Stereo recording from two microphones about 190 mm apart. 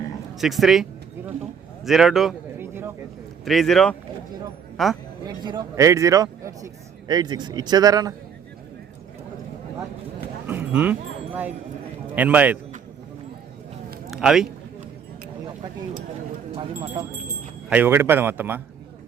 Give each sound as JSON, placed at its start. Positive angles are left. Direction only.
{"t": 0.3, "sound": "speech", "side_deg": 0}
{"t": 2.6, "sound": "a sound", "side_deg": -10}
{"t": 3.4, "sound": "speech", "side_deg": 0}
{"t": 5.2, "sound": "a man's voice", "side_deg": -20}
{"t": 10.4, "sound": "cattle", "side_deg": -10}
{"t": 12.1, "sound": "speech", "side_deg": -10}
{"t": 14.1, "sound": "speech", "side_deg": -5}
{"t": 16.5, "sound": "speech", "side_deg": -30}
{"t": 17.7, "sound": "speech", "side_deg": -10}